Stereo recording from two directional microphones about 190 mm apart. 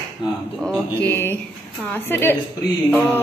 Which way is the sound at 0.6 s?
5° left (ahead or behind).